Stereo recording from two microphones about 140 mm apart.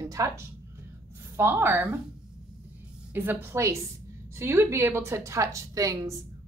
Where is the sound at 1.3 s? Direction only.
15° right (ahead or behind).